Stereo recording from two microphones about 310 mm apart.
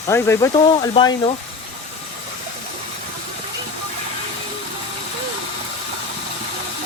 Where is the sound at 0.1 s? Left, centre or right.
Centre.